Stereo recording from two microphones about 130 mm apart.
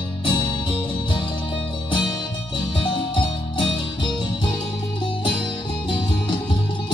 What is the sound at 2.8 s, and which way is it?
Music, 40° left (ahead or behind).